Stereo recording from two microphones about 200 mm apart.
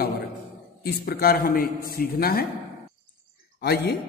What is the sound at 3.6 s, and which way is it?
Speech, 55° left (ahead or behind).